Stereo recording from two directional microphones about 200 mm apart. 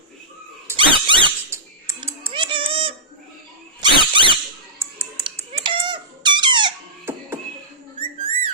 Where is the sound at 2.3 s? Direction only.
25° right (ahead or behind).